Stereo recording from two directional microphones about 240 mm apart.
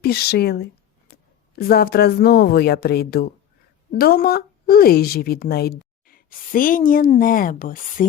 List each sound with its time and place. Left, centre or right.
0.0 s a woman's voice: left